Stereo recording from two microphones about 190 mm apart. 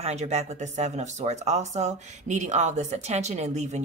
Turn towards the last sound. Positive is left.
turn(degrees=-35)  # may be behind; listen again after turning